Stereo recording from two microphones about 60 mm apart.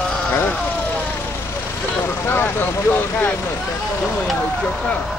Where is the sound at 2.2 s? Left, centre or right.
Left.